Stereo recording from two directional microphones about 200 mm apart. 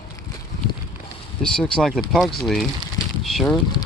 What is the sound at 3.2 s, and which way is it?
Boat, centre (ahead or behind).